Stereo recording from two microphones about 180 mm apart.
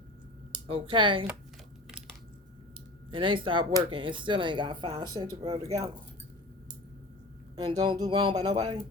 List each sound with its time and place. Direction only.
0.7 s speech: 30° right (ahead or behind)
3.1 s speech: 30° right (ahead or behind)
7.8 s speech: 20° right (ahead or behind)